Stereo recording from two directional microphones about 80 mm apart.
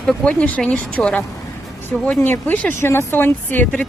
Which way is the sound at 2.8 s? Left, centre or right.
Left.